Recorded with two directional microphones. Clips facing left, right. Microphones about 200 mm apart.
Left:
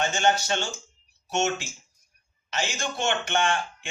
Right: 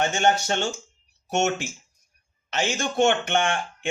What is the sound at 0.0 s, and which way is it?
Speech, 55° right (ahead or behind).